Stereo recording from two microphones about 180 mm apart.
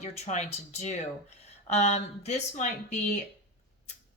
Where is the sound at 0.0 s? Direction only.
40° left (ahead or behind).